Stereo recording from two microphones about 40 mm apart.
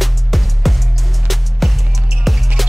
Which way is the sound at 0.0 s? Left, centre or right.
Centre.